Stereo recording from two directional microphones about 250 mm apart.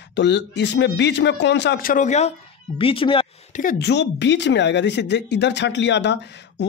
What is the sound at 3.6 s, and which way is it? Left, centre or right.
Speech, left.